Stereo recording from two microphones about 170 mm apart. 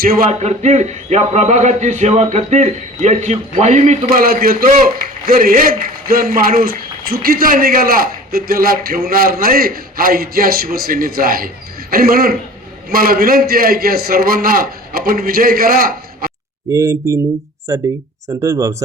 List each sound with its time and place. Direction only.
0.0 s a man's voice: 60° right (ahead or behind)
0.3 s a man's voice: 40° right (ahead or behind)
4.2 s a man's voice: 60° right (ahead or behind)
16.7 s speech: 20° right (ahead or behind)